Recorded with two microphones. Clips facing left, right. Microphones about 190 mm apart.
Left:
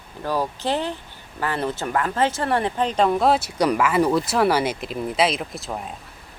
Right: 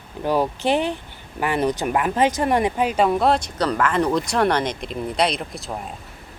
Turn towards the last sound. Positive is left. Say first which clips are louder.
# even
turn(degrees=0)  # may be behind; listen again after turning